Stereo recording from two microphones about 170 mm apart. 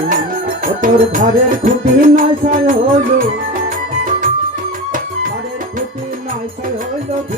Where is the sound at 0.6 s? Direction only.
55° right (ahead or behind).